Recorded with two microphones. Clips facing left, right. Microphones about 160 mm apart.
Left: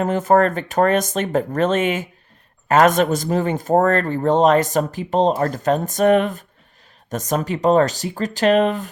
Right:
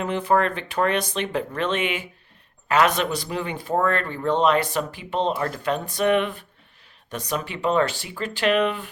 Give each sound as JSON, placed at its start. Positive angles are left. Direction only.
{"t": 0.0, "sound": "speech", "side_deg": 45}